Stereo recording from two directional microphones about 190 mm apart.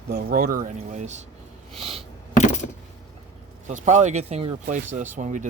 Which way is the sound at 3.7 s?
40° right (ahead or behind).